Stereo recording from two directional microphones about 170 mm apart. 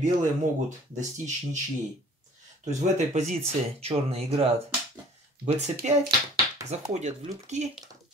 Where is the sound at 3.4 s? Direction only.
35° right (ahead or behind).